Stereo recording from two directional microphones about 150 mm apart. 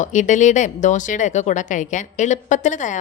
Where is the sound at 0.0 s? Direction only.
55° left (ahead or behind).